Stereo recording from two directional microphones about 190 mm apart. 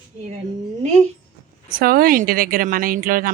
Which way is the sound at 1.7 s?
50° right (ahead or behind).